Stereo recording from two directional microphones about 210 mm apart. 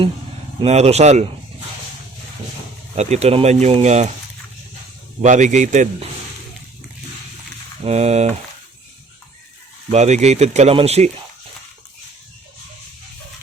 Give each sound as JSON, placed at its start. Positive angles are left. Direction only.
{"t": 0.6, "sound": "speech", "side_deg": -30}
{"t": 2.9, "sound": "speech", "side_deg": -30}
{"t": 5.2, "sound": "speech", "side_deg": -35}
{"t": 7.9, "sound": "speech", "side_deg": -30}
{"t": 9.9, "sound": "speech", "side_deg": -35}